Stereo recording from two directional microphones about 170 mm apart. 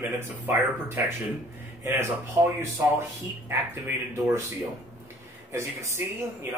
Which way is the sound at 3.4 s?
15° right (ahead or behind).